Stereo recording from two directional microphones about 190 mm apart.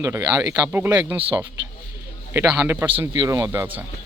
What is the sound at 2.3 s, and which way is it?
Speech, 15° right (ahead or behind).